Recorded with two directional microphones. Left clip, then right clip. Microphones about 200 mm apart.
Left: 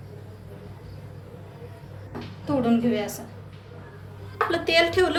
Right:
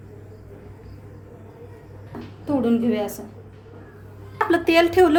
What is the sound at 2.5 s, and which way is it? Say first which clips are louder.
Speech: right 2 dB; 40° right (ahead or behind).